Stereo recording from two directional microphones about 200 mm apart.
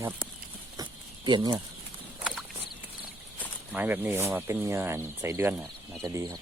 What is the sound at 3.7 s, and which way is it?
Speech, 10° right (ahead or behind).